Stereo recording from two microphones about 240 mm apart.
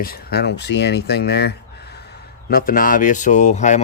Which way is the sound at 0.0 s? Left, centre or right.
Left.